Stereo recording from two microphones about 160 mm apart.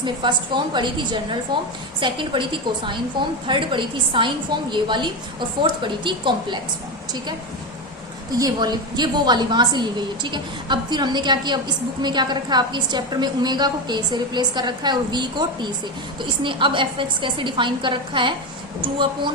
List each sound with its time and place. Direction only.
0.0 s a woman's voice: 30° right (ahead or behind)
8.3 s a woman's voice: 25° right (ahead or behind)